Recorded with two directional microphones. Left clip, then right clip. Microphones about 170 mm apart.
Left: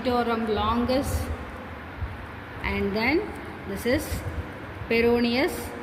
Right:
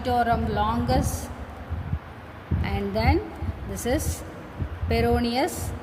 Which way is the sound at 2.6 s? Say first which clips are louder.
Left 1 dB; 70° right (ahead or behind).